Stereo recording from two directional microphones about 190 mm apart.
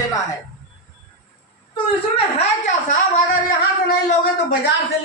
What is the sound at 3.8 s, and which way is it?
Speech, 55° left (ahead or behind).